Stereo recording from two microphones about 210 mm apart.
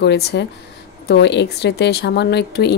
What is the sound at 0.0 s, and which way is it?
A woman's voice, 55° left (ahead or behind).